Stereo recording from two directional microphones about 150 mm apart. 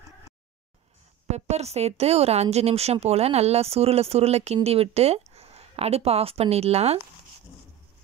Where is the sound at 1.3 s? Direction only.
45° right (ahead or behind).